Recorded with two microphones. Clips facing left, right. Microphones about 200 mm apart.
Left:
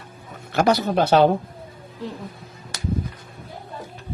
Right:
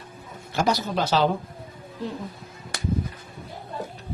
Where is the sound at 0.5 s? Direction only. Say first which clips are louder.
Left 5 dB; 60° left (ahead or behind).